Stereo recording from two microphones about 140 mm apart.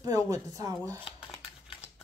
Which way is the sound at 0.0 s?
25° right (ahead or behind).